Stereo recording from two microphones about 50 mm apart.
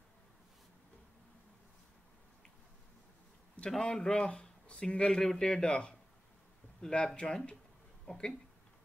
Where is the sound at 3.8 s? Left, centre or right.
Centre.